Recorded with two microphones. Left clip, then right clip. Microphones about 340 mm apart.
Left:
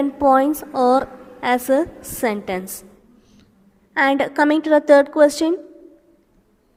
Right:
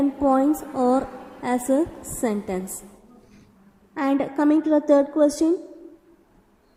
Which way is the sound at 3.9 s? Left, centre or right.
Left.